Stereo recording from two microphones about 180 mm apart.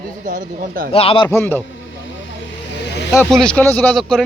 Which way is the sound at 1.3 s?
10° left (ahead or behind).